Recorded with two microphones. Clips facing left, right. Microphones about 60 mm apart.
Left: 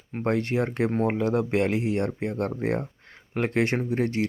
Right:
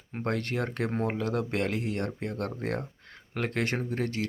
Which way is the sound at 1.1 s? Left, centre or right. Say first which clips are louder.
Left 6 dB; left.